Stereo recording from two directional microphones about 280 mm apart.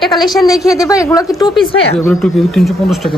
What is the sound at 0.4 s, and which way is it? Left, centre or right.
A woman's voice, centre.